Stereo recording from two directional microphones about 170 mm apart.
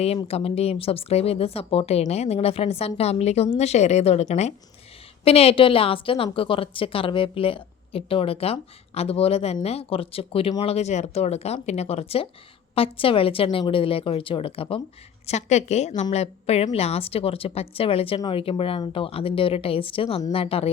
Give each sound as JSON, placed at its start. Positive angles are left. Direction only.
{"t": 0.3, "sound": "a woman's voice", "side_deg": 35}